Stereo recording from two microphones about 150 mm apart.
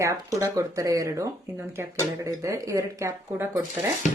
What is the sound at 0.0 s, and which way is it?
Speech, 20° right (ahead or behind).